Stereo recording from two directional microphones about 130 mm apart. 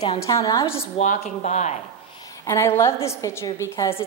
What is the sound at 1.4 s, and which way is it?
Speech, 65° left (ahead or behind).